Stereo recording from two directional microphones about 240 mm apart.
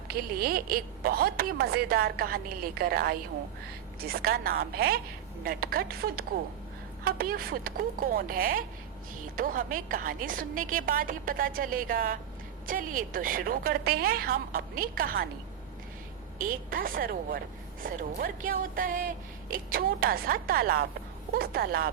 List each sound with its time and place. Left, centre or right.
0.1 s a woman's voice: right
16.4 s a woman's voice: right